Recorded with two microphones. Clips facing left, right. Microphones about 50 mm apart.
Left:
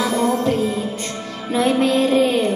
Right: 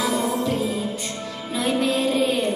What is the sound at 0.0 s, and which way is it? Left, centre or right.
Music, left.